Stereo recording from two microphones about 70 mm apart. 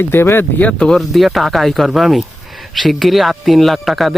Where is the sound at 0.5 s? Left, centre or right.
Centre.